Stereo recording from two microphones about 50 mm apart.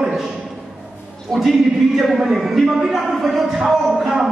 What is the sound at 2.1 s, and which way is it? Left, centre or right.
Speech, centre.